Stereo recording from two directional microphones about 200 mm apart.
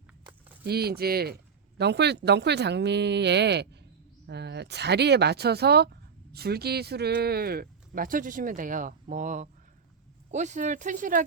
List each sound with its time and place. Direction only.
0.6 s speech: 50° right (ahead or behind)